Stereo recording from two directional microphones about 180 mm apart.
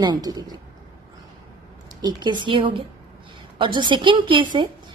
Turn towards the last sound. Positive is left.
turn(degrees=-25)  # may be behind; listen again after turning